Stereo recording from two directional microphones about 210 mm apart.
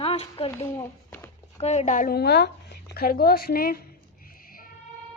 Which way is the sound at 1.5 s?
30° left (ahead or behind).